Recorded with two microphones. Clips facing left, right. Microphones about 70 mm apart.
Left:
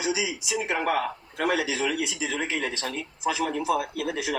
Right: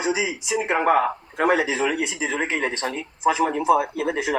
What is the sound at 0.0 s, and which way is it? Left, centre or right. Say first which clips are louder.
A man's voice: right 4 dB; right.